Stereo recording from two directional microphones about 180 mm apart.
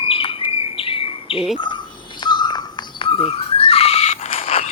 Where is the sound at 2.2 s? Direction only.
25° left (ahead or behind).